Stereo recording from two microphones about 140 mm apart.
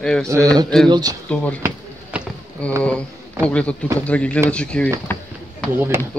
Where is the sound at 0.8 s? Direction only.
30° right (ahead or behind).